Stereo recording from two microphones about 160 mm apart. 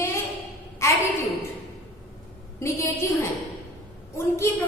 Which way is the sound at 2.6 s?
15° left (ahead or behind).